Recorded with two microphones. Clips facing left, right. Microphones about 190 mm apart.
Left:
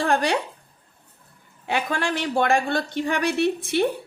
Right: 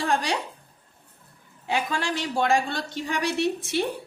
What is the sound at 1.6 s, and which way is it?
Speech, 60° left (ahead or behind).